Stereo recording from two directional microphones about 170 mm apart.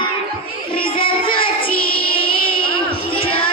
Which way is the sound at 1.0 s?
30° left (ahead or behind).